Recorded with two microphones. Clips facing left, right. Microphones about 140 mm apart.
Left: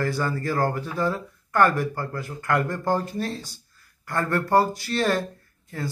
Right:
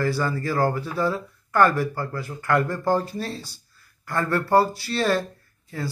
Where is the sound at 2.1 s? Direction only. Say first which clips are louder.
Right 3 dB; 45° left (ahead or behind).